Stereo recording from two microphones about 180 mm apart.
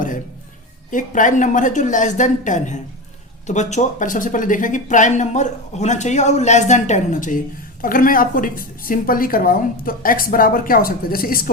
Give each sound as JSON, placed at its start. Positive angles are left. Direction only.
{"t": 0.9, "sound": "speech", "side_deg": 45}